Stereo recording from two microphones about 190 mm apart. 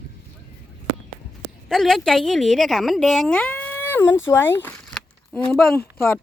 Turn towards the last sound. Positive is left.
turn(degrees=10)  # may be behind; listen again after turning